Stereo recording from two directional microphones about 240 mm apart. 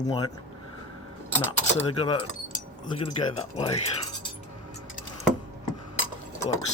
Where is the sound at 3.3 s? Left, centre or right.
Left.